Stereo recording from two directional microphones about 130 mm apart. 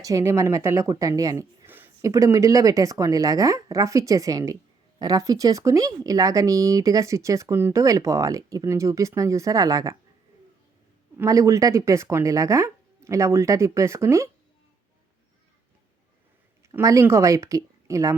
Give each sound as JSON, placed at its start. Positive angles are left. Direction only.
{"t": 0.0, "sound": "speech", "side_deg": -25}
{"t": 1.6, "sound": "speech", "side_deg": -15}
{"t": 11.2, "sound": "speech", "side_deg": -25}
{"t": 16.6, "sound": "speech", "side_deg": -20}